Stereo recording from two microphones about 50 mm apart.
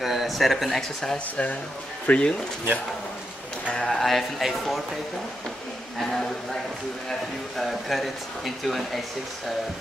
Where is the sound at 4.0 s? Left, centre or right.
Centre.